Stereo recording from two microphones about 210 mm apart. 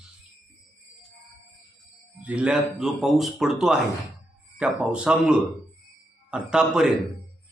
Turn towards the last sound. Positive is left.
turn(degrees=-5)  # may be behind; listen again after turning